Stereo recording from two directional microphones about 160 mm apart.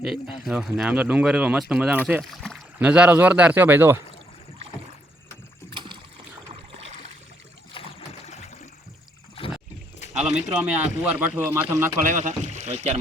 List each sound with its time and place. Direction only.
0.0 s speech: centre (ahead or behind)
2.3 s a sound: 5° left (ahead or behind)
2.7 s speech: 10° right (ahead or behind)
5.7 s rowboat: 30° right (ahead or behind)
7.7 s a sound: 35° left (ahead or behind)
9.3 s rowboat: 35° left (ahead or behind)
10.2 s bird: 5° right (ahead or behind)
10.5 s speech: 10° right (ahead or behind)
12.0 s speech: 50° right (ahead or behind)